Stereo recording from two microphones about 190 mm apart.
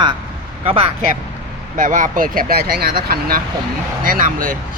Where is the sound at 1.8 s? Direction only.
45° right (ahead or behind).